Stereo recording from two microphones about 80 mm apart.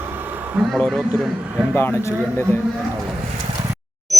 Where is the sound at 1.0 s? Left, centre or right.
Centre.